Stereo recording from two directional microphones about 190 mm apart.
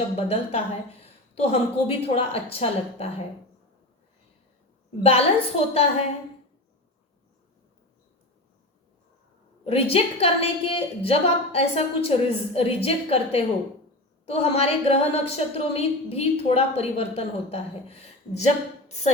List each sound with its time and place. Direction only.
0.2 s speech: 30° left (ahead or behind)
5.0 s speech: 30° left (ahead or behind)
9.6 s speech: 30° left (ahead or behind)